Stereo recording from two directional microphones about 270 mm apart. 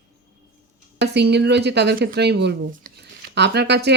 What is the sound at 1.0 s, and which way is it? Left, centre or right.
Speech, right.